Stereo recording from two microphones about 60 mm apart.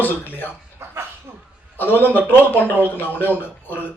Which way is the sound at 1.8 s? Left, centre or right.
Left.